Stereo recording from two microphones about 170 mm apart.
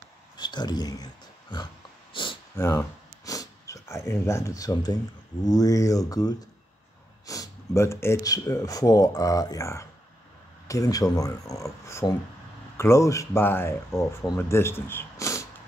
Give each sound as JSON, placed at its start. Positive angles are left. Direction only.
{"t": 0.4, "sound": "speech", "side_deg": 25}
{"t": 2.1, "sound": "a sound", "side_deg": 30}
{"t": 2.6, "sound": "speech", "side_deg": 15}